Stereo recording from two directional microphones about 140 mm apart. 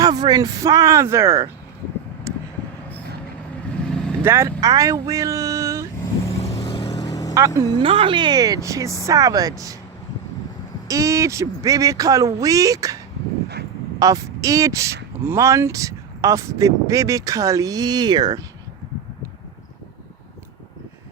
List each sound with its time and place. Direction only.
0.0 s speech: 30° right (ahead or behind)
2.3 s a sound: 20° right (ahead or behind)
3.8 s vehicle: 5° left (ahead or behind)
4.2 s speech: 15° right (ahead or behind)
6.7 s vehicle: 30° left (ahead or behind)
7.8 s speech: 40° right (ahead or behind); by 9.7 s 25° right (ahead or behind)
10.8 s speech: 25° right (ahead or behind)
14.0 s speech: 25° right (ahead or behind)